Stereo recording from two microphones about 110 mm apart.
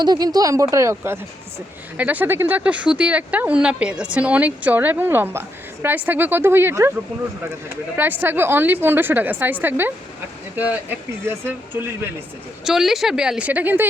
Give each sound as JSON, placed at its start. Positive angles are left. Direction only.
{"t": 0.0, "sound": "a woman's voice", "side_deg": -40}
{"t": 7.9, "sound": "a woman's voice", "side_deg": -20}
{"t": 12.6, "sound": "a woman's voice", "side_deg": -5}